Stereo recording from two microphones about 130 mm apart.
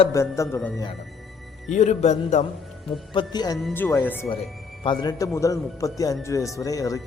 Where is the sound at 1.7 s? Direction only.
65° left (ahead or behind).